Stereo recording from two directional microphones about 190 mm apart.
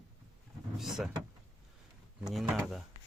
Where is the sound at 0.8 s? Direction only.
Centre (ahead or behind).